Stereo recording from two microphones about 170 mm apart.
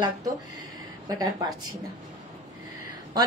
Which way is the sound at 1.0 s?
20° right (ahead or behind).